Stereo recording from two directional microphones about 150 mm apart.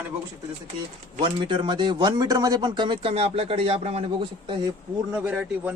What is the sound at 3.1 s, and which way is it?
Speech, 45° right (ahead or behind).